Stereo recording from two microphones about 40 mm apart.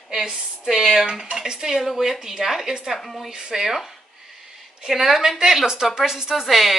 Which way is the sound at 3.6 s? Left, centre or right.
Centre.